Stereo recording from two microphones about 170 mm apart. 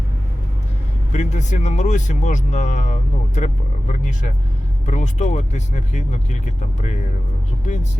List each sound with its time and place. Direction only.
1.1 s speech: 45° left (ahead or behind)